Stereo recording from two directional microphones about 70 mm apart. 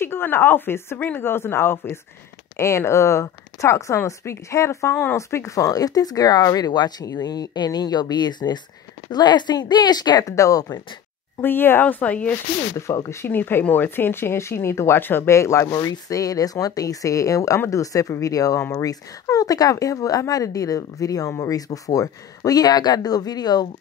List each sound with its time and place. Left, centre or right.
0.0 s speech: left
7.1 s a woman's voice: left
10.3 s speech: left
11.4 s a woman's voice: left
12.7 s speech: left
13.3 s speech: left
15.2 s speech: left
15.8 s speech: left
18.6 s speech: left
18.9 s speech: left